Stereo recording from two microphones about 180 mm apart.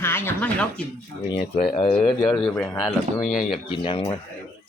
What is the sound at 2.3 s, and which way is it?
Speech, 10° left (ahead or behind).